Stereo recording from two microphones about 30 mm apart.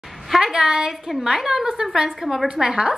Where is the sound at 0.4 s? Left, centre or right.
Right.